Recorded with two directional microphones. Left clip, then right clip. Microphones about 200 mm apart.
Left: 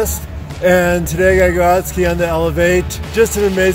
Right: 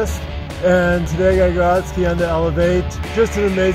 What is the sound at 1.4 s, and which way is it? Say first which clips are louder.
Speech: left 3 dB; 25° left (ahead or behind).